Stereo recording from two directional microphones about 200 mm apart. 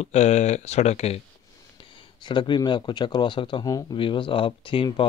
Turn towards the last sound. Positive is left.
turn(degrees=25)  # may be behind; listen again after turning